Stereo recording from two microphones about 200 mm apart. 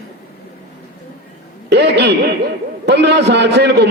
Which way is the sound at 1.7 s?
55° right (ahead or behind).